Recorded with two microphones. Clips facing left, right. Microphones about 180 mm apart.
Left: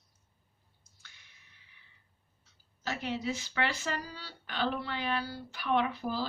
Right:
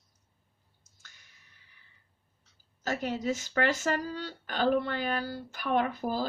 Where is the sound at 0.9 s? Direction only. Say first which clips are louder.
Right 1 dB; 45° right (ahead or behind).